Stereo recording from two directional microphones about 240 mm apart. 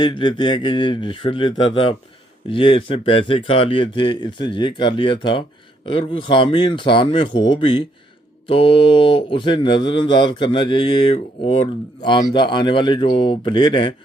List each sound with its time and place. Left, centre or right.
0.0 s speech: centre